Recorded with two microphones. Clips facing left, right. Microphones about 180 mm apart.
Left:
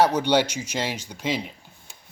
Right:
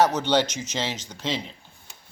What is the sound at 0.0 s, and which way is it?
Speech, 10° left (ahead or behind).